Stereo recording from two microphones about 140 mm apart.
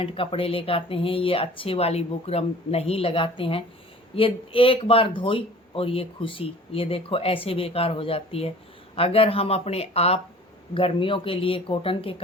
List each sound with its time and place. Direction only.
0.0 s speech: 40° left (ahead or behind)